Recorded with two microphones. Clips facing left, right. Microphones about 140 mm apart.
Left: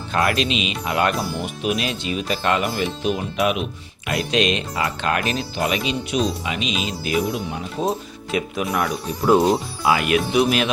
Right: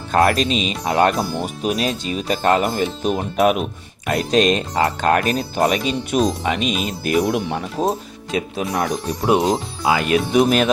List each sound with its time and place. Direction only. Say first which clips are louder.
0.1 s speech: right 4 dB; 40° right (ahead or behind)
7.3 s speech: right 5 dB; 65° right (ahead or behind)
8.3 s speech: right 1 dB; 30° right (ahead or behind)
10.3 s speech: right 4 dB; 40° right (ahead or behind)